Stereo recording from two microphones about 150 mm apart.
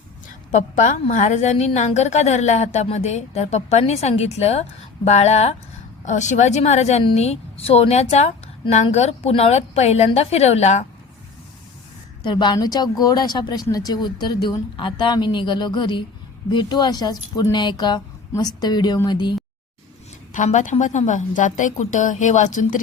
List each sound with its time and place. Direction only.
0.5 s a woman's voice: 55° left (ahead or behind)
12.3 s a woman's voice: 30° left (ahead or behind)
20.3 s a woman's voice: 55° left (ahead or behind)